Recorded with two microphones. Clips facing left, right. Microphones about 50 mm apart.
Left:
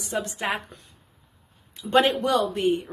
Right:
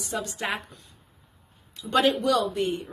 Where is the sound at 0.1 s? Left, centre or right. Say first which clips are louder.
Left 3 dB; left.